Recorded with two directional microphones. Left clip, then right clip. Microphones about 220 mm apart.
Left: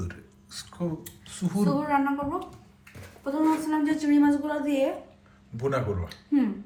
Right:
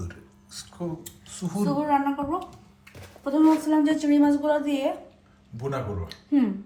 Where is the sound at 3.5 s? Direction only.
45° right (ahead or behind).